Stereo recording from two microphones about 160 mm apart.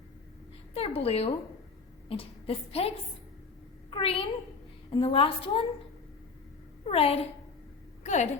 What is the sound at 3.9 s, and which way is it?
A woman's voice, 35° left (ahead or behind).